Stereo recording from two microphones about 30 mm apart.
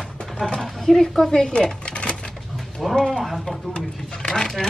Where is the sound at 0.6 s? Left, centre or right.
Centre; by 1.9 s left.